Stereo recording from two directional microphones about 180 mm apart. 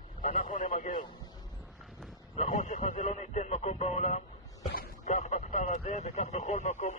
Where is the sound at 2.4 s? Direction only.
40° left (ahead or behind).